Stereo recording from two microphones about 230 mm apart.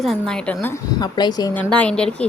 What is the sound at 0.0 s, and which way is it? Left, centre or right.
A woman's voice, centre.